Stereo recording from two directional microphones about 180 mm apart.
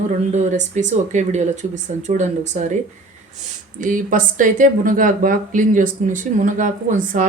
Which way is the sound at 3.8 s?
50° right (ahead or behind).